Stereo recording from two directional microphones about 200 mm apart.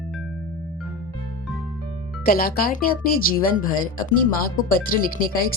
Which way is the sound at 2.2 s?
45° left (ahead or behind).